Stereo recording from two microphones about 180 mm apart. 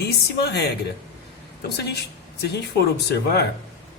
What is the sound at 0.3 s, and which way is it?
Speech, 65° left (ahead or behind).